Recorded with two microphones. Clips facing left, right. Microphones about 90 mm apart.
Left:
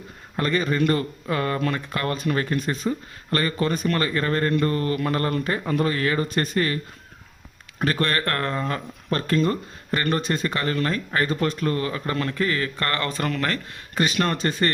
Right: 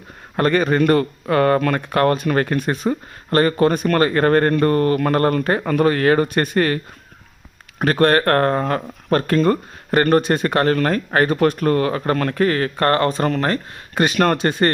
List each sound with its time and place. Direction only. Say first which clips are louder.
0.3 s speech: right 6 dB; 60° right (ahead or behind)
7.8 s speech: right 8 dB; 50° right (ahead or behind)
13.9 s speech: right 6 dB; 50° right (ahead or behind)